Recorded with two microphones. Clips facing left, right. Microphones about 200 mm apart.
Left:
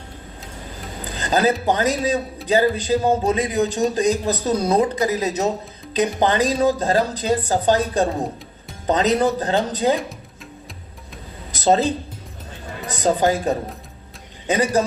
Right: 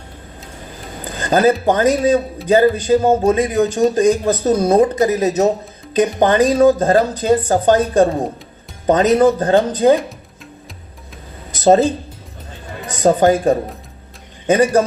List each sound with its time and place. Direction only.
1.1 s a sound: 50° right (ahead or behind)
1.6 s speech: 50° right (ahead or behind)
11.6 s speech: 50° right (ahead or behind)
13.0 s speech: 50° right (ahead or behind)